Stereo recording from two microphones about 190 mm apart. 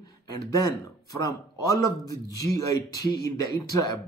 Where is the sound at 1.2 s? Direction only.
15° left (ahead or behind).